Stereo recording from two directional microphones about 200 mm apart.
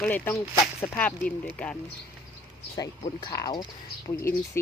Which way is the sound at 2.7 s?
20° left (ahead or behind).